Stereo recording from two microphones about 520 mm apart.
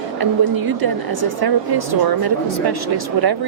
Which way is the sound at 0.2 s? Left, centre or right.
Right.